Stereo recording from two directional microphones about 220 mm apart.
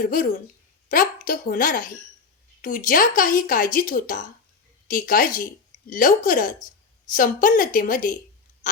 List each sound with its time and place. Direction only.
0.0 s speech: 40° left (ahead or behind)